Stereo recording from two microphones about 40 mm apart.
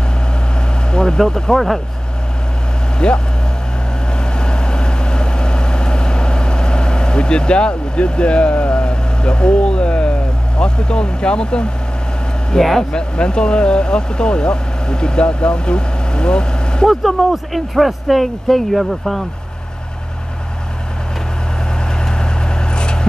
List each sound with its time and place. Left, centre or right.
0.9 s speech: centre
3.0 s speech: left
4.2 s vehicle: left
10.6 s speech: left
12.5 s speech: centre
12.9 s speech: left
16.9 s speech: centre
22.0 s vehicle: left